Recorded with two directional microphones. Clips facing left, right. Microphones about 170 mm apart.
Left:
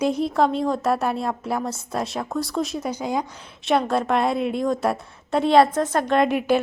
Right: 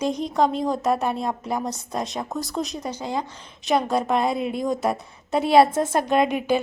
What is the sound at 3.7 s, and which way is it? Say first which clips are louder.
A woman's voice: left 1 dB; centre (ahead or behind).